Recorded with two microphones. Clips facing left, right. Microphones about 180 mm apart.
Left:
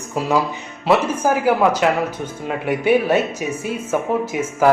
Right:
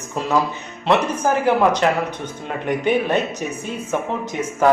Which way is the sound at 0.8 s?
5° left (ahead or behind).